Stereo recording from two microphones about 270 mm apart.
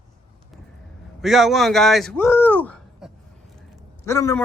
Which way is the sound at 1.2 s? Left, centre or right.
Centre.